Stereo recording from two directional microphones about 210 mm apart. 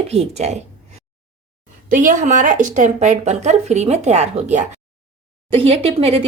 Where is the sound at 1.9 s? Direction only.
35° right (ahead or behind).